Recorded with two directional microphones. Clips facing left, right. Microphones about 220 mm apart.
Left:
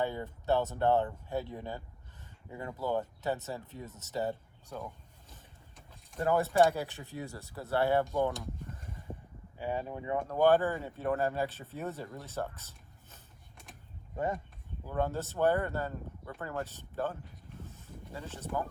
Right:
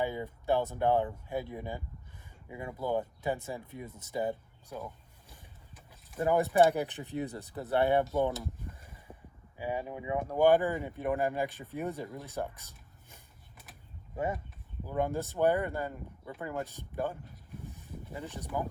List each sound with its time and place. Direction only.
0.0 s speech: 10° right (ahead or behind)
6.1 s speech: 15° right (ahead or behind)
9.6 s speech: 10° right (ahead or behind)
14.8 s speech: 15° right (ahead or behind)